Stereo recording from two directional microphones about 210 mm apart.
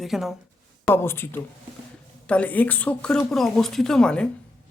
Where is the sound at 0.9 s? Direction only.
10° left (ahead or behind).